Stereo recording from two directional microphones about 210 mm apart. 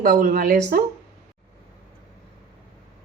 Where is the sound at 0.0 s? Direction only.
40° right (ahead or behind).